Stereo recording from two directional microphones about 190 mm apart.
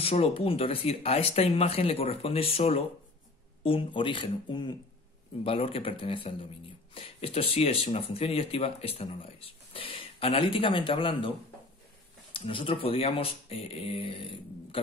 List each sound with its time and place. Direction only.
0.0 s speech: 30° left (ahead or behind)